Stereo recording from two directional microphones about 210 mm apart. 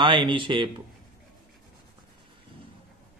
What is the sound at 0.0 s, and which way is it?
Speech, 25° right (ahead or behind).